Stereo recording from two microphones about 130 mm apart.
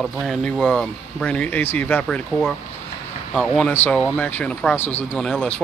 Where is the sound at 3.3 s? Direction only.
Centre (ahead or behind).